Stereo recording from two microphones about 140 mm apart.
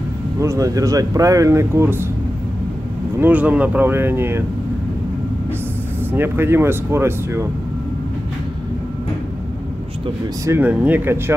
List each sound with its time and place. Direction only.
0.4 s speech: 25° right (ahead or behind)
3.2 s speech: 10° right (ahead or behind)
6.1 s speech: 15° right (ahead or behind)
10.4 s speech: 15° right (ahead or behind)